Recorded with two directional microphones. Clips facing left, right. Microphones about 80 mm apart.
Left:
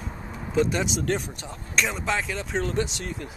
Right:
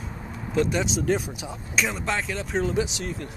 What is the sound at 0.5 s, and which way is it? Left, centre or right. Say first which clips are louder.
Speech: even; centre.